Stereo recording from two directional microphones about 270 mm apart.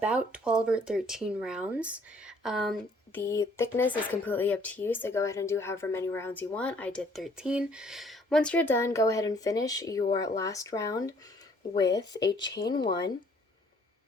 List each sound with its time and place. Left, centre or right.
0.3 s speech: centre
12.3 s speech: centre